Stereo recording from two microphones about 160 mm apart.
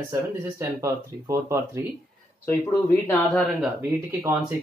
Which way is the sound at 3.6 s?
15° right (ahead or behind).